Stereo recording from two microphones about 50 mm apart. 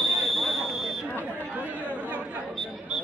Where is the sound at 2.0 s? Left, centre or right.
Right.